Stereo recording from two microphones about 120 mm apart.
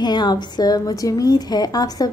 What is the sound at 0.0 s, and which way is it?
A woman's voice, 35° left (ahead or behind).